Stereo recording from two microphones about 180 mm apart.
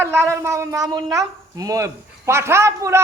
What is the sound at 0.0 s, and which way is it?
Speech, 15° right (ahead or behind).